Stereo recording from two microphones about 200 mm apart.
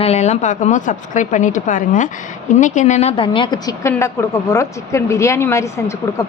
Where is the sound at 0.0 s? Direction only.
35° left (ahead or behind).